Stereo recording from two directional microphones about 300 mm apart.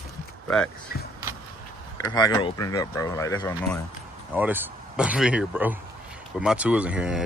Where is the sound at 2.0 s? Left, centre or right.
Centre.